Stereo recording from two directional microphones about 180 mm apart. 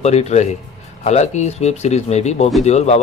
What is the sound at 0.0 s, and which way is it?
Speech, 35° left (ahead or behind).